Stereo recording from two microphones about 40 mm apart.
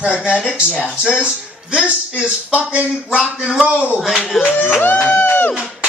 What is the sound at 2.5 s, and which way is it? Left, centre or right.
Speech, right.